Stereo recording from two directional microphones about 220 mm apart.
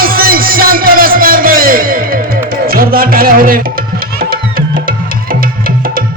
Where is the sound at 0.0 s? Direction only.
40° right (ahead or behind).